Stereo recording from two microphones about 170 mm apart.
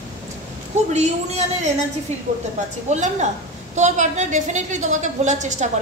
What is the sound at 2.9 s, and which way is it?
A woman's voice, 45° right (ahead or behind).